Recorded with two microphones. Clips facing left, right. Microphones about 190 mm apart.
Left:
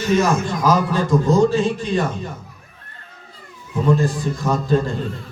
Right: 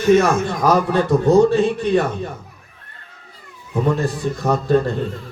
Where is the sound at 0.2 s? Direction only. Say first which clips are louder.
Right 1 dB; 60° right (ahead or behind).